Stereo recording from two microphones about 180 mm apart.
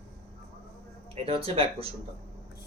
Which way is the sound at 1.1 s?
35° right (ahead or behind).